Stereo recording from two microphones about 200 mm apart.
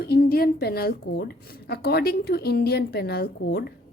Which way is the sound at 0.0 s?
50° left (ahead or behind).